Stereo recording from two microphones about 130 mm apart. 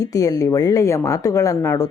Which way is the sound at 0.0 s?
25° left (ahead or behind).